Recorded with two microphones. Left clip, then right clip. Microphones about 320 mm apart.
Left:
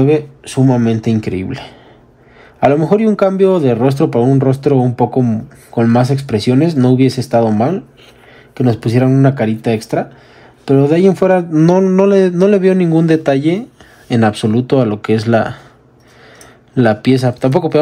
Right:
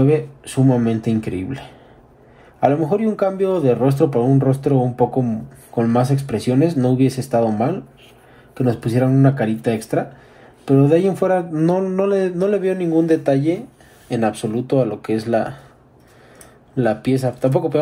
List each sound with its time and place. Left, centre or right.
0.0 s speech: left
2.7 s speech: left
16.7 s speech: left